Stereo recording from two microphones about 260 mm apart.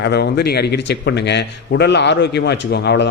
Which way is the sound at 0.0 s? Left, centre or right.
Left.